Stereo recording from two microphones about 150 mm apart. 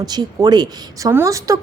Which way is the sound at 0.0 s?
25° right (ahead or behind).